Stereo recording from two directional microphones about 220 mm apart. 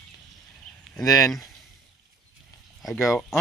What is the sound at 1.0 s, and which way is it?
Speech, 15° left (ahead or behind).